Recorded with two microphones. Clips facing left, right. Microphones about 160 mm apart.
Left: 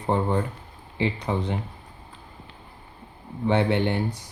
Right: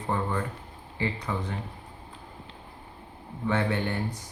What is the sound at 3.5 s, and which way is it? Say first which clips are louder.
Speech: left 5 dB; 25° left (ahead or behind).